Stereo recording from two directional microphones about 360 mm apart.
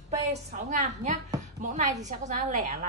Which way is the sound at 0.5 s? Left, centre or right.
Centre.